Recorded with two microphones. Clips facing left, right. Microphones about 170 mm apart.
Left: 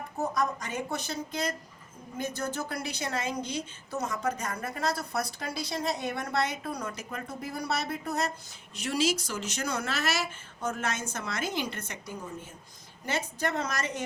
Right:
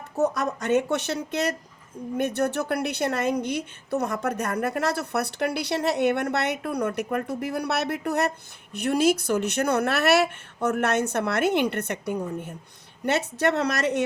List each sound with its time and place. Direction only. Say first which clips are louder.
0.2 s a woman's voice: right 6 dB; 70° right (ahead or behind)
8.7 s a woman's voice: right 7 dB; 55° right (ahead or behind)